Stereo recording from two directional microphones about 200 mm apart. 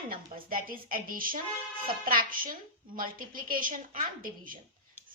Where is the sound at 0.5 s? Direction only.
45° right (ahead or behind).